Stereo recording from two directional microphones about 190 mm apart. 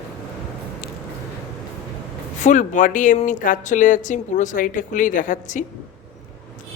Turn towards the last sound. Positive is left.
turn(degrees=40)  # may be behind; listen again after turning